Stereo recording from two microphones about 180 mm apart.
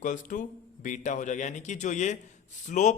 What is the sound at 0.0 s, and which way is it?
A man's voice, 45° left (ahead or behind).